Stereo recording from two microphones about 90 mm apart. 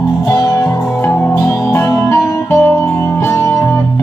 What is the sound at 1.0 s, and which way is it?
Music, 25° left (ahead or behind).